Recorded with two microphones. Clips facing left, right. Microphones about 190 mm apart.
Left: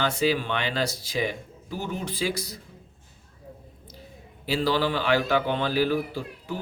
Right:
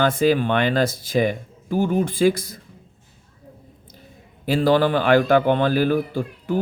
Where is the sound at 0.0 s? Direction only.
50° right (ahead or behind).